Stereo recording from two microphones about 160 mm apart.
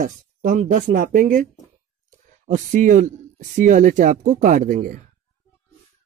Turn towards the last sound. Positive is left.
turn(degrees=-55)  # may be behind; listen again after turning